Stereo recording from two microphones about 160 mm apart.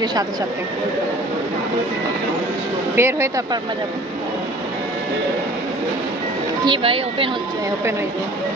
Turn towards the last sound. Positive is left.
turn(degrees=-35)  # may be behind; listen again after turning